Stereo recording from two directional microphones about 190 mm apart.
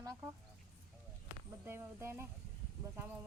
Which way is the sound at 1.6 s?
10° right (ahead or behind).